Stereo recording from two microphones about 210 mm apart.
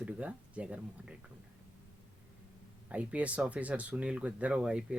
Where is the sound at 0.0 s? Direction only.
5° right (ahead or behind).